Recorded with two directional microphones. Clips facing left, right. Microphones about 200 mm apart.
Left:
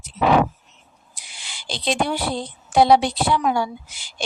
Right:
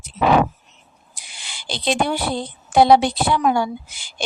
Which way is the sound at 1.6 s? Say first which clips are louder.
Right 2 dB; 60° right (ahead or behind).